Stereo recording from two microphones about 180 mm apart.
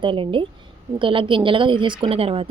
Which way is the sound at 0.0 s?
30° right (ahead or behind).